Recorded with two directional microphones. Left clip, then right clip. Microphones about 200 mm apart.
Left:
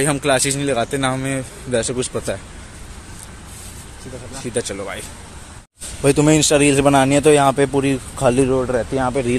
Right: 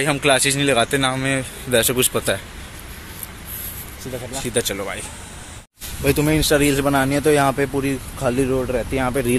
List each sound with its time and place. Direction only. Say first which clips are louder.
0.0 s speech: even; 5° left (ahead or behind)
4.6 s speech: right 1 dB; centre (ahead or behind)
6.0 s speech: left 4 dB; 30° left (ahead or behind)
8.5 s speech: left 3 dB; 10° left (ahead or behind)